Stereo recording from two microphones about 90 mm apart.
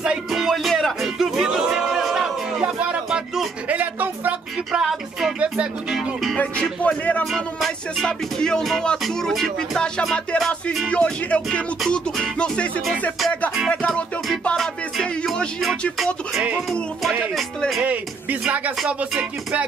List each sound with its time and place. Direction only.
0.0 s music: 5° right (ahead or behind)
2.6 s a sound: 10° right (ahead or behind)
3.7 s music: 20° right (ahead or behind)
4.7 s music: 5° right (ahead or behind)
5.4 s music: 15° right (ahead or behind)
6.3 s music: 15° left (ahead or behind)
7.3 s music: 5° left (ahead or behind)
10.9 s music: 10° left (ahead or behind)
17.6 s music: centre (ahead or behind)
18.9 s music: 15° right (ahead or behind)